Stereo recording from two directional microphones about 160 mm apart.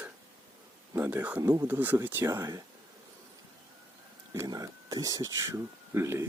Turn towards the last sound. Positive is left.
turn(degrees=-15)  # may be behind; listen again after turning